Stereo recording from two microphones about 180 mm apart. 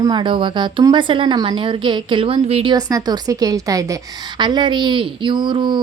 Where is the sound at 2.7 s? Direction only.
20° right (ahead or behind).